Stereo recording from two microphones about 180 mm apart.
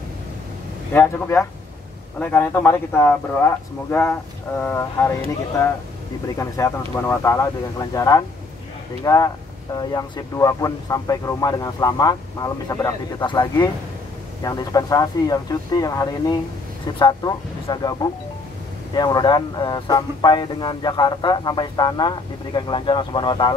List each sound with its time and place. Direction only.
0.9 s speech: 15° left (ahead or behind)
6.2 s speech: 15° left (ahead or behind)
14.4 s speech: 20° left (ahead or behind)